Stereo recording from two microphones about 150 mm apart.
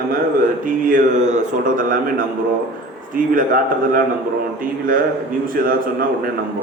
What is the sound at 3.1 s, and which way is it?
A man's voice, 65° right (ahead or behind).